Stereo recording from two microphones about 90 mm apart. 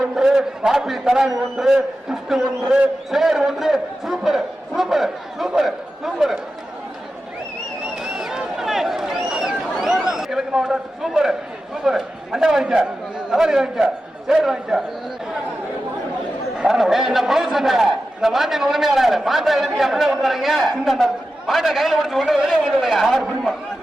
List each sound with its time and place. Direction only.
0.0 s a man's voice: 5° right (ahead or behind)
8.0 s a sound: 5° right (ahead or behind)
11.8 s a man's voice: 5° right (ahead or behind)
16.6 s a man's voice: 5° right (ahead or behind)